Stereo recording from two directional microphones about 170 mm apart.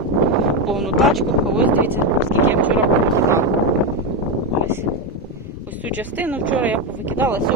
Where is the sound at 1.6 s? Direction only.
10° right (ahead or behind).